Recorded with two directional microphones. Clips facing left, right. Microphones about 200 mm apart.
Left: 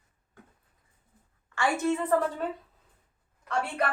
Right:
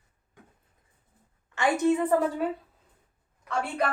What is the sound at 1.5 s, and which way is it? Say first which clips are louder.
Speech: right 3 dB; 20° right (ahead or behind).